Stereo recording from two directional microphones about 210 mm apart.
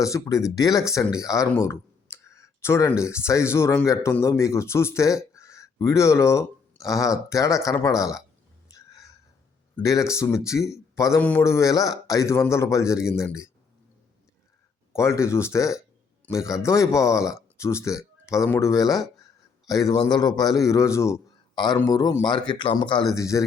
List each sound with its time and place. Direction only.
0.0 s speech: 15° left (ahead or behind)
8.7 s a sound: 15° left (ahead or behind)
9.7 s speech: 15° left (ahead or behind)
14.9 s a man's voice: 15° left (ahead or behind)